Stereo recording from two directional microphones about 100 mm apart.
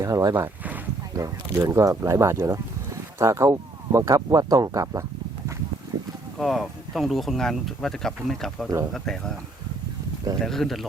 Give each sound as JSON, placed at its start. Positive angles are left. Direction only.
{"t": 0.0, "sound": "speech", "side_deg": -35}
{"t": 0.3, "sound": "boat", "side_deg": -20}
{"t": 1.1, "sound": "speech", "side_deg": -35}
{"t": 6.4, "sound": "speech", "side_deg": 0}
{"t": 10.4, "sound": "speech", "side_deg": 5}